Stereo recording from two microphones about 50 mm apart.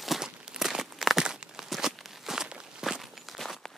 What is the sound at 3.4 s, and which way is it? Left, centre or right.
Walk, centre.